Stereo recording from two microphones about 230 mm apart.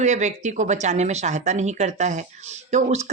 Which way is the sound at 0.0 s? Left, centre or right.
Right.